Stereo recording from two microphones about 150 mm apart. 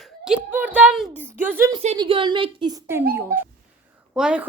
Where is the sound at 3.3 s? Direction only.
75° right (ahead or behind).